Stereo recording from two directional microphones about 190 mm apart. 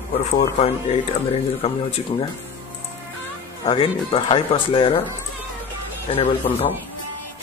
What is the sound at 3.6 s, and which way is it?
Speech, 30° left (ahead or behind).